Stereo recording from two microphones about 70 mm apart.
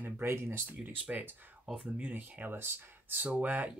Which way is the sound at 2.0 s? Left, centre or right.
Right.